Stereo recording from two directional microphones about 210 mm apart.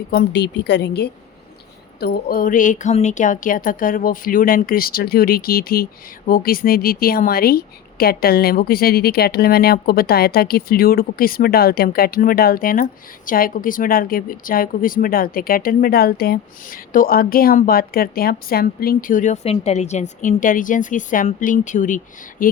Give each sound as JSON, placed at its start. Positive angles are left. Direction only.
{"t": 0.1, "sound": "speech", "side_deg": 50}